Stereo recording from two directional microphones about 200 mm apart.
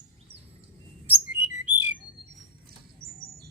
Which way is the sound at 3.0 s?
50° right (ahead or behind).